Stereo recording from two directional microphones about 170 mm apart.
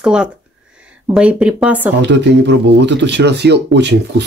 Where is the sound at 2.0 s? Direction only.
90° right.